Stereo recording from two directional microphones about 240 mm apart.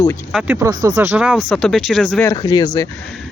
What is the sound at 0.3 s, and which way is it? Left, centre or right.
Speech, centre.